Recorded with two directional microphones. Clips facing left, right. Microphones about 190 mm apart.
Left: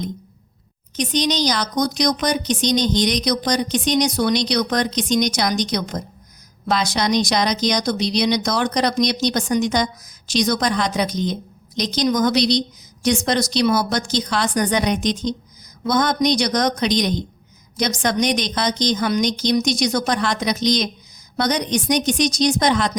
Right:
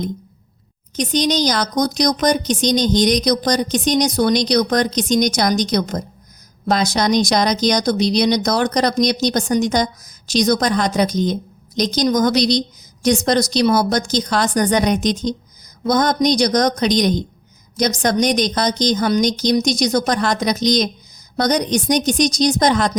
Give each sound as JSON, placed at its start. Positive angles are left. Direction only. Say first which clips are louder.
{"t": 0.9, "sound": "a woman's voice", "louder": "right 3 dB", "side_deg": -45}